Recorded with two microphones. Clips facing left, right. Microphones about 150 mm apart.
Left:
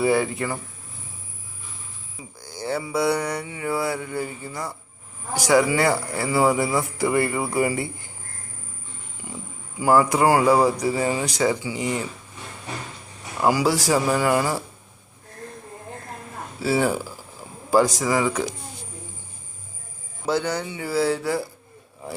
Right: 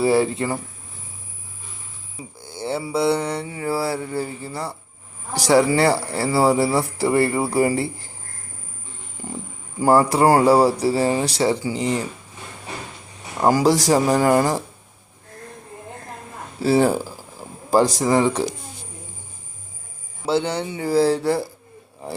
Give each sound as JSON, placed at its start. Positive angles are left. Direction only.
{"t": 0.0, "sound": "speech", "side_deg": -30}
{"t": 0.3, "sound": "mantra", "side_deg": -30}
{"t": 2.5, "sound": "mantra", "side_deg": -25}
{"t": 9.2, "sound": "speech", "side_deg": -45}
{"t": 9.8, "sound": "mantra", "side_deg": -40}
{"t": 13.5, "sound": "mantra", "side_deg": -40}
{"t": 16.6, "sound": "speech", "side_deg": -40}
{"t": 18.0, "sound": "mantra", "side_deg": -35}
{"t": 20.2, "sound": "mantra", "side_deg": -30}